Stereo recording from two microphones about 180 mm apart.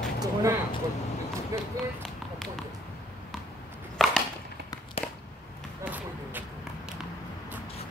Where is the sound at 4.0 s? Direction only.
Centre (ahead or behind).